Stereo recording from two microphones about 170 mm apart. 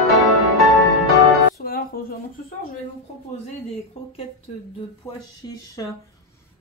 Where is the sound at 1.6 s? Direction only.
60° left (ahead or behind).